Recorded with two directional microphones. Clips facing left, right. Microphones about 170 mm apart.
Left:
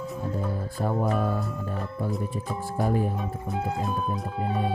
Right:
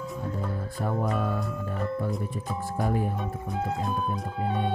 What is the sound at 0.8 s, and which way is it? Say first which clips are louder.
Speech: left 2 dB; 30° left (ahead or behind).